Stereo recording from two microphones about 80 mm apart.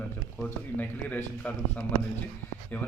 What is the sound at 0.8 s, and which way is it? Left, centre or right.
A man's voice, left.